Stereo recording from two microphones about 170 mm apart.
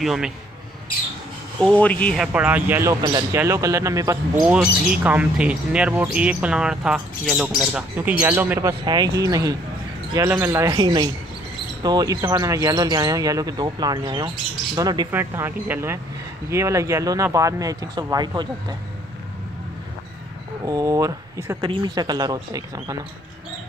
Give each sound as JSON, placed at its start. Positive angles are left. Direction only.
{"t": 0.0, "sound": "speech", "side_deg": 0}
{"t": 1.6, "sound": "speech", "side_deg": 10}
{"t": 2.3, "sound": "speech", "side_deg": -10}
{"t": 4.5, "sound": "speech", "side_deg": -5}
{"t": 20.6, "sound": "speech", "side_deg": -20}
{"t": 21.5, "sound": "speech", "side_deg": -30}